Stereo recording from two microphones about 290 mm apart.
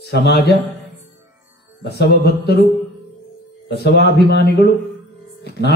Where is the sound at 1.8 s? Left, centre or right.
Left.